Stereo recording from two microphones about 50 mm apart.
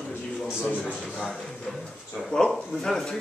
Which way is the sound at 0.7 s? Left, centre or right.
Left.